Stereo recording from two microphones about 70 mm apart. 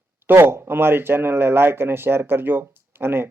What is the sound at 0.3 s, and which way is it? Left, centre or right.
Speech, right.